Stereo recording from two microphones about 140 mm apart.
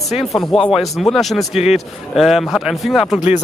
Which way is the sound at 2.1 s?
Centre (ahead or behind).